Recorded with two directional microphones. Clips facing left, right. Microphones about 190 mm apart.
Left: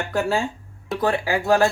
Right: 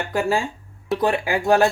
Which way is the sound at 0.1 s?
10° right (ahead or behind).